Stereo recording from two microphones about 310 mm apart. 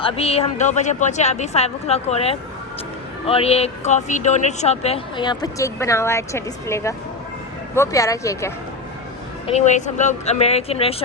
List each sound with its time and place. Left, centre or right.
0.0 s speech: centre
9.5 s speech: left